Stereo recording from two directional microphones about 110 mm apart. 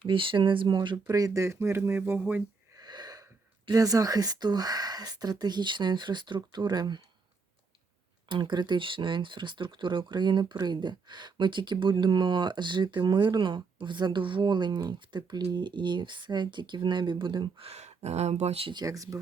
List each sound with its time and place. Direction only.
0.0 s speech: 50° right (ahead or behind)
1.0 s speech: 30° right (ahead or behind); by 2.4 s 15° right (ahead or behind)
2.7 s a sound: 40° right (ahead or behind)
3.7 s speech: 30° right (ahead or behind)
8.3 s speech: 45° right (ahead or behind)
17.7 s speech: 90° right; by 18.7 s 70° right (ahead or behind)
18.7 s speech: 35° right (ahead or behind)